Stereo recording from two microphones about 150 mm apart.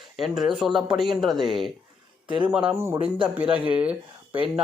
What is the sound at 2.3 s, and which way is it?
Speech, 35° right (ahead or behind).